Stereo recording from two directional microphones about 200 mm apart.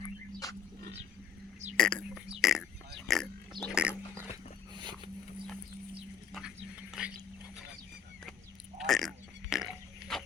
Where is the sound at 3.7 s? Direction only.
5° right (ahead or behind).